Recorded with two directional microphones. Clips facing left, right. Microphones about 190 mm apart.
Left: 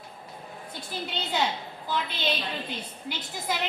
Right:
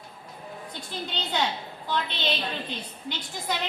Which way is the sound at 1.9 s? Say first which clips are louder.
Right 1 dB; 10° left (ahead or behind).